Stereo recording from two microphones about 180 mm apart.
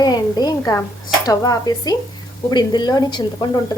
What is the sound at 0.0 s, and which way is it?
Speech, 20° left (ahead or behind).